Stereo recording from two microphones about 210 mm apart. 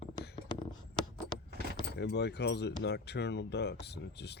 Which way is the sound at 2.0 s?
55° left (ahead or behind).